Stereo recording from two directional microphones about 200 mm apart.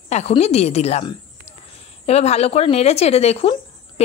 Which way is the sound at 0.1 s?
30° left (ahead or behind).